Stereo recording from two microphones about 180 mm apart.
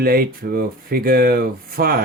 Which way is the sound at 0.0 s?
55° right (ahead or behind).